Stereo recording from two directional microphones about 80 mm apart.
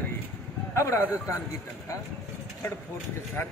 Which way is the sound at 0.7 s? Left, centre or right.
Left.